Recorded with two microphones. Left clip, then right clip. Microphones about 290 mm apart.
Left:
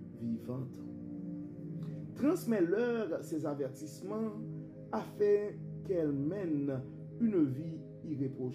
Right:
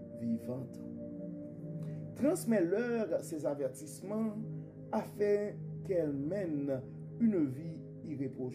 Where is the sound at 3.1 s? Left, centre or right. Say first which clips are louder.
Right 2 dB; right.